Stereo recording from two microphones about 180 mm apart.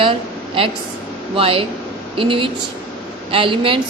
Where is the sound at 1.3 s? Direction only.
30° right (ahead or behind).